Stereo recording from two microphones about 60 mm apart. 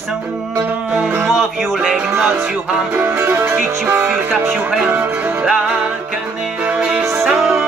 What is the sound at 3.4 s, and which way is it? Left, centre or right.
Music, right.